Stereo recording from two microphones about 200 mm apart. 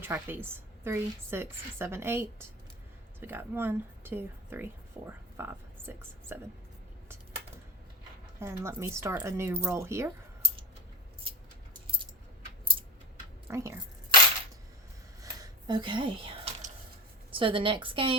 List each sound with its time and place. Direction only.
0.0 s a woman's voice: 10° right (ahead or behind)
8.4 s a woman's voice: 15° right (ahead or behind)
13.5 s a woman's voice: 15° right (ahead or behind)
15.2 s a sound: 20° right (ahead or behind)
17.3 s a woman's voice: 25° right (ahead or behind)